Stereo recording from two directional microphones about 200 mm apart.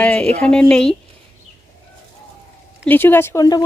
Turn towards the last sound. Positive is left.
turn(degrees=20)  # may be behind; listen again after turning